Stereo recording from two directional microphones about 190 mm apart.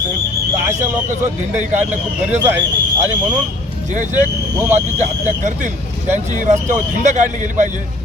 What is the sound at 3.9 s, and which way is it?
A man's voice, 40° right (ahead or behind).